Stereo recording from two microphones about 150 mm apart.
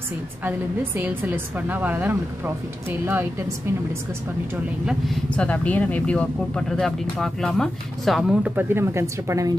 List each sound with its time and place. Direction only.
0.5 s a woman's voice: 10° right (ahead or behind)
4.8 s speech: centre (ahead or behind); by 9.5 s 20° right (ahead or behind)